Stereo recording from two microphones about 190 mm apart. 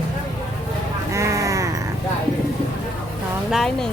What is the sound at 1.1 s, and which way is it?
Sheep, 15° right (ahead or behind).